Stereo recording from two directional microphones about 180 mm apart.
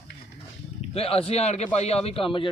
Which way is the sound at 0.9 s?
35° left (ahead or behind).